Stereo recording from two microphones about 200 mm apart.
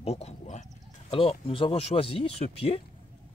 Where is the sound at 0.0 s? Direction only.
30° left (ahead or behind).